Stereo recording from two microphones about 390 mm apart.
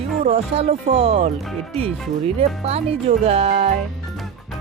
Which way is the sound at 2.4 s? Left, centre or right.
Centre.